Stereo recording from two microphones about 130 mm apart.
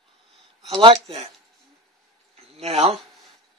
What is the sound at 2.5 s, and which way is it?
Speech, 50° right (ahead or behind).